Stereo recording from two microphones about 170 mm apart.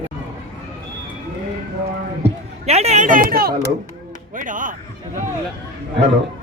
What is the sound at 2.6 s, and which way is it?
Speech, 40° right (ahead or behind).